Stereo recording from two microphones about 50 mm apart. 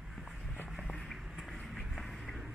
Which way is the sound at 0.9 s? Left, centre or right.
Centre.